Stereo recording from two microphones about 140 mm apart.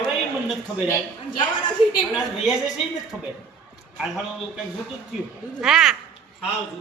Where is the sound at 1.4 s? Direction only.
35° left (ahead or behind).